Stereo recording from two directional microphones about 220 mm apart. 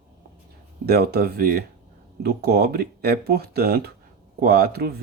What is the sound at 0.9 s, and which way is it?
Speech, 45° right (ahead or behind).